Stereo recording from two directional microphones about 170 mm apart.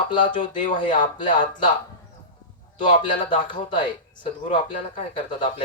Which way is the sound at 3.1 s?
30° left (ahead or behind).